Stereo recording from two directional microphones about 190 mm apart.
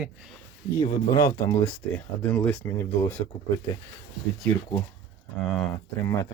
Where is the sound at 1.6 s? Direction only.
5° left (ahead or behind).